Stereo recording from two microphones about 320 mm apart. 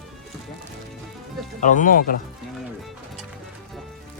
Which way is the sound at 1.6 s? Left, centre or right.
Left.